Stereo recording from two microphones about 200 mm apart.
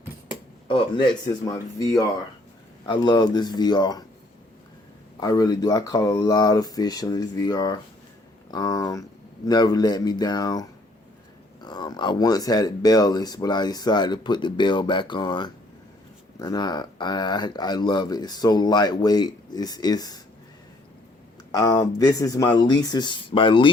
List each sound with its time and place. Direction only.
0.7 s speech: 25° left (ahead or behind)
5.2 s speech: 20° left (ahead or behind)
21.5 s speech: 15° left (ahead or behind)